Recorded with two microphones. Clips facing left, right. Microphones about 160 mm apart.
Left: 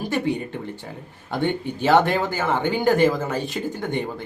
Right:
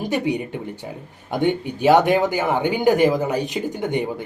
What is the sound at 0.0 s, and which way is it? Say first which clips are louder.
Speech: right 2 dB; 15° right (ahead or behind).